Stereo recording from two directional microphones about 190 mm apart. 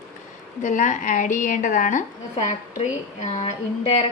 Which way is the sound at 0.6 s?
40° left (ahead or behind).